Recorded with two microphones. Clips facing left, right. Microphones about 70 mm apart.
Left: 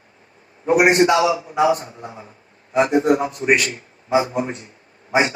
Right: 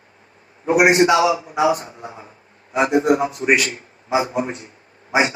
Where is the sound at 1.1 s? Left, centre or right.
Right.